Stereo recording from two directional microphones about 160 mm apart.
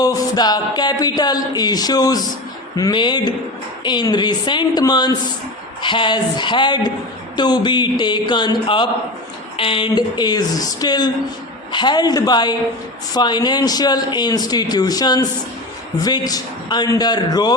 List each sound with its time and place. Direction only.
0.0 s speech: 25° left (ahead or behind)